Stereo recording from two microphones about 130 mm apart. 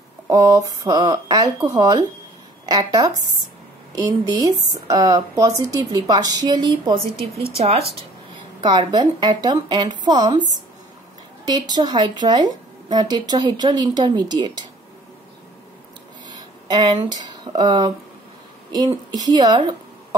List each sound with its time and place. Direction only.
0.3 s a woman's voice: 25° right (ahead or behind)
4.3 s a woman's voice: 30° right (ahead or behind)
6.9 s a woman's voice: 50° right (ahead or behind)
8.5 s a woman's voice: 35° right (ahead or behind)
16.3 s a woman's voice: 30° right (ahead or behind)